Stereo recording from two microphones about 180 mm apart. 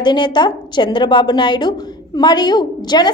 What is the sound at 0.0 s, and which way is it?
A woman's voice, 25° left (ahead or behind).